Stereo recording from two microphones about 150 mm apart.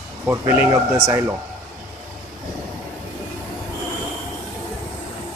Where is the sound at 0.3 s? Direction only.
15° right (ahead or behind).